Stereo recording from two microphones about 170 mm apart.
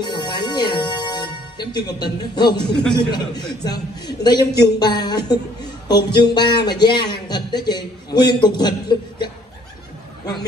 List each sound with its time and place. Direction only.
0.0 s music: 25° left (ahead or behind)
3.0 s speech: 25° left (ahead or behind)